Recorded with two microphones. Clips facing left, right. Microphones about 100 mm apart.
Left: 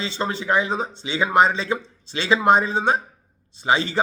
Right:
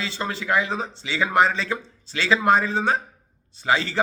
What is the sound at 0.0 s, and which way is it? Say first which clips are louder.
A man's voice: left 3 dB; 25° left (ahead or behind).